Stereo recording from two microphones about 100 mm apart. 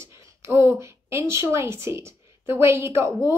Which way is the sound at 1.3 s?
30° right (ahead or behind).